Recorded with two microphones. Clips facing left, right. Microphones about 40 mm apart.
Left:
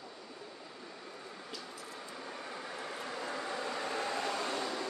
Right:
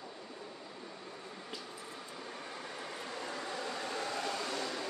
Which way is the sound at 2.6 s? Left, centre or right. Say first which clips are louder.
Left 2 dB; centre.